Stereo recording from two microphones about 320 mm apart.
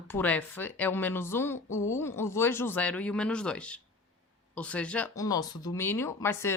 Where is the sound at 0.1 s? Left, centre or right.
Centre.